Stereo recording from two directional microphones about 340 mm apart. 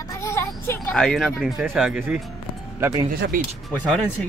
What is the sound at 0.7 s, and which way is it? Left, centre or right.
Speech, centre.